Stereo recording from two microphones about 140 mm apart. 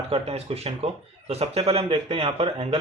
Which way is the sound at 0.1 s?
40° right (ahead or behind).